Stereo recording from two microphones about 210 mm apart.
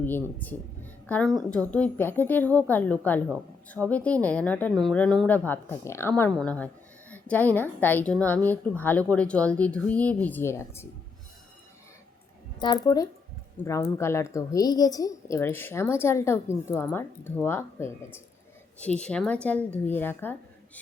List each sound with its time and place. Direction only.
0.0 s a woman's voice: 10° left (ahead or behind)
12.5 s a woman's voice: 20° left (ahead or behind)